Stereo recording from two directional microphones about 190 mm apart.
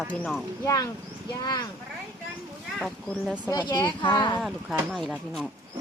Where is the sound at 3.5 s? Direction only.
20° left (ahead or behind).